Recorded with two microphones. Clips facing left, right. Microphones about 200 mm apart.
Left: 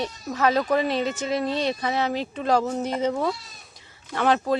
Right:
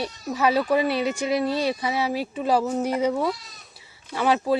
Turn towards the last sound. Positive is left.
turn(degrees=-10)  # may be behind; listen again after turning